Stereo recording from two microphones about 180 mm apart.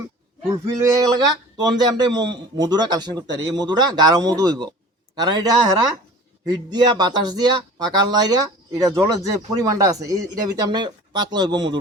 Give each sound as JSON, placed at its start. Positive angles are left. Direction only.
{"t": 0.5, "sound": "speech", "side_deg": -15}